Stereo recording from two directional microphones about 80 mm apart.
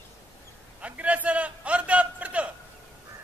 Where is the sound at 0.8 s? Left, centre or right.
Centre.